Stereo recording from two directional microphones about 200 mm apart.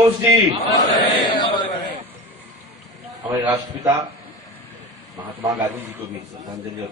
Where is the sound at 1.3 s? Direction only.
25° left (ahead or behind).